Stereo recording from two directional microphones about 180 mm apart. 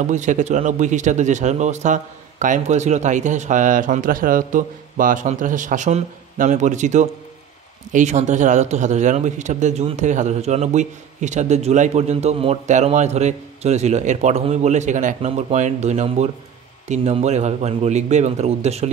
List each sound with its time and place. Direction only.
0.0 s a man's voice: 45° right (ahead or behind)